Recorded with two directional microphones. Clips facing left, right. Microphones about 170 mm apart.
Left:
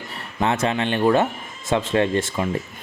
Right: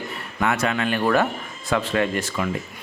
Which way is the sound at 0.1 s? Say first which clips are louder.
Left 2 dB; 25° left (ahead or behind).